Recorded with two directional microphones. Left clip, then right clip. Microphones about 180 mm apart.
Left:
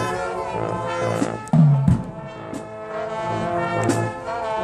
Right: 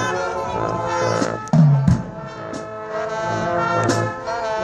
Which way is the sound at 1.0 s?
40° right (ahead or behind).